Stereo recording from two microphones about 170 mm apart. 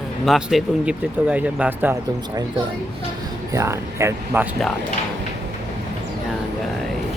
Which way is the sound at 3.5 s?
15° right (ahead or behind).